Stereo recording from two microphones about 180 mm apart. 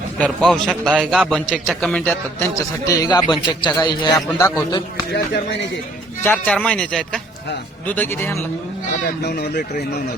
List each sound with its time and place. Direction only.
0.2 s a man's voice: 5° left (ahead or behind); by 4.8 s 20° left (ahead or behind)
6.2 s a man's voice: 10° left (ahead or behind)